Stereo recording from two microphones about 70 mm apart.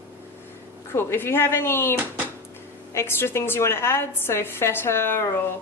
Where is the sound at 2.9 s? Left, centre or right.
Left.